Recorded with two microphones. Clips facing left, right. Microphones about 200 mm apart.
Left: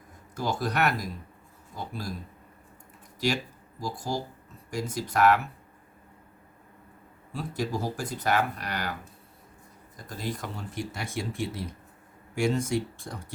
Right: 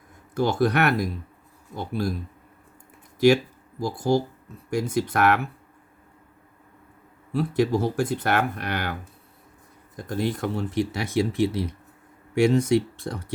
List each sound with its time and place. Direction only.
0.3 s speech: 65° right (ahead or behind)
3.2 s speech: 60° right (ahead or behind)
7.3 s speech: 65° right (ahead or behind)
10.1 s speech: 65° right (ahead or behind)